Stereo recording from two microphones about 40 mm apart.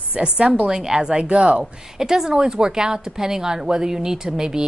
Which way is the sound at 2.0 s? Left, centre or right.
Centre.